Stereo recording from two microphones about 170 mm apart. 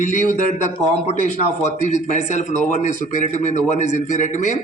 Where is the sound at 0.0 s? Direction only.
50° left (ahead or behind).